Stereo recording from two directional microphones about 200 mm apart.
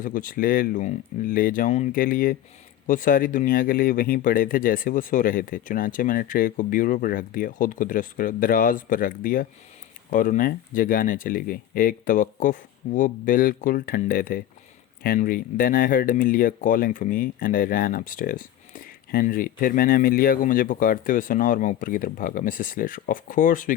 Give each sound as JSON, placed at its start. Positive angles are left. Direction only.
{"t": 0.0, "sound": "speech", "side_deg": 40}